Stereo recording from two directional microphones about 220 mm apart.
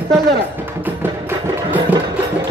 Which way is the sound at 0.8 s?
10° right (ahead or behind).